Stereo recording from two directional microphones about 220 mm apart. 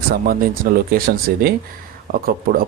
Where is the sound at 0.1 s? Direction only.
40° right (ahead or behind).